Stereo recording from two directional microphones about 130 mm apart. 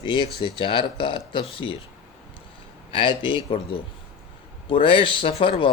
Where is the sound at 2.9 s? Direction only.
40° left (ahead or behind).